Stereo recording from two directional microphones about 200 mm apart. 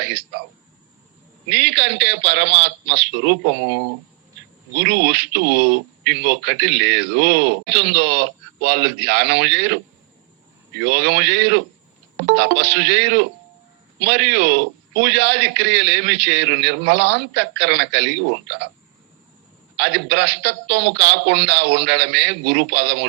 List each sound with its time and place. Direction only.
1.5 s speech: 60° right (ahead or behind)
4.8 s speech: 60° right (ahead or behind)
19.7 s speech: 60° right (ahead or behind)